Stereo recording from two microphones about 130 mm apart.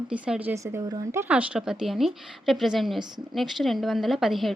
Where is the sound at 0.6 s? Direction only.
25° right (ahead or behind).